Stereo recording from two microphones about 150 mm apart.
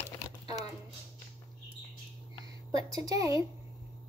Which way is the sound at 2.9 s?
25° right (ahead or behind).